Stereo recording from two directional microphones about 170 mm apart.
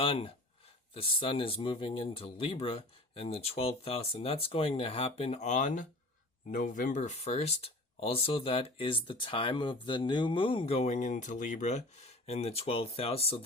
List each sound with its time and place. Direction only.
0.0 s speech: 35° left (ahead or behind)